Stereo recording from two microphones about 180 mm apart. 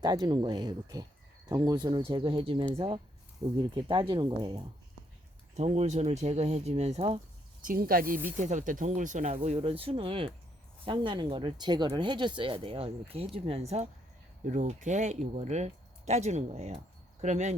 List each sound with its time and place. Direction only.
0.0 s speech: 25° right (ahead or behind)
5.5 s speech: 35° right (ahead or behind)
7.6 s speech: 50° right (ahead or behind)